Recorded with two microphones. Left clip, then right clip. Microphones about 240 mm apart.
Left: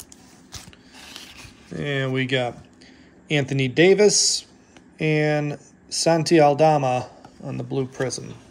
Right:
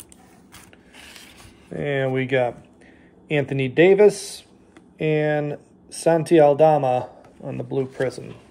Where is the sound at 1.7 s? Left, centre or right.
Centre.